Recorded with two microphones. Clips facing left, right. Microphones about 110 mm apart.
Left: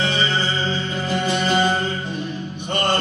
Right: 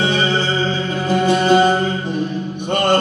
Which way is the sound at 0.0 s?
55° right (ahead or behind).